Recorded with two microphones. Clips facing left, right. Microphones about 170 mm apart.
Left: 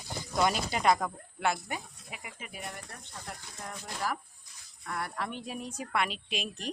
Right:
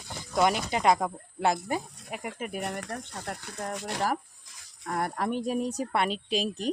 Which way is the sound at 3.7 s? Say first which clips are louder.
Right 9 dB; 75° right (ahead or behind).